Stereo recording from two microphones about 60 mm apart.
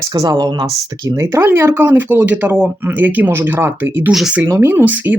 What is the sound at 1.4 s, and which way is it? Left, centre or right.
Speech, right.